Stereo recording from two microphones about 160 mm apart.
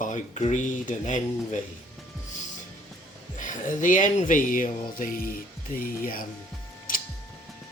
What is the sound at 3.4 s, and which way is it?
Speech, 55° left (ahead or behind).